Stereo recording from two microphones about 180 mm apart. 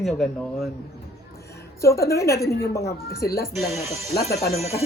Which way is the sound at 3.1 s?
60° left (ahead or behind).